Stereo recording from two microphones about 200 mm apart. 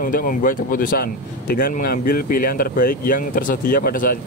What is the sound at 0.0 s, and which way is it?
A man's voice, 45° left (ahead or behind).